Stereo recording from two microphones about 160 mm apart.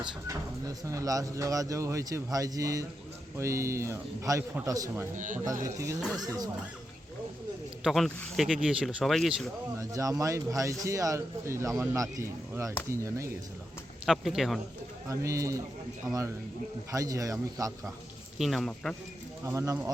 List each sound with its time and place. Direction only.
0.0 s a man's voice: 20° right (ahead or behind)
5.1 s speech: 55° right (ahead or behind)
5.6 s speech: 20° right (ahead or behind)
7.9 s speech: centre (ahead or behind)
9.9 s speech: 20° right (ahead or behind)
14.0 s speech: centre (ahead or behind)
15.1 s speech: 20° right (ahead or behind)
18.3 s speech: centre (ahead or behind)
19.5 s speech: 20° right (ahead or behind)